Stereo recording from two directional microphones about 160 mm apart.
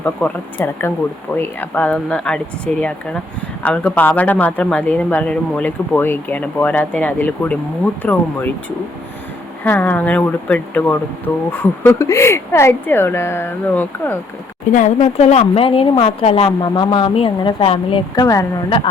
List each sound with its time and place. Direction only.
0.0 s speech: 10° left (ahead or behind)
3.6 s speech: 10° left (ahead or behind)
9.6 s speech: 10° left (ahead or behind)
14.7 s a woman's voice: 50° left (ahead or behind); by 18.4 s 20° left (ahead or behind)